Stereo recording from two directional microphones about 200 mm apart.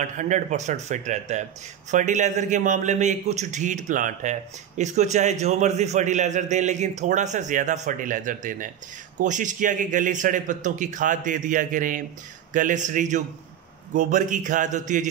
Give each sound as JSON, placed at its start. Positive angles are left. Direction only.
{"t": 0.0, "sound": "a man's voice", "side_deg": -40}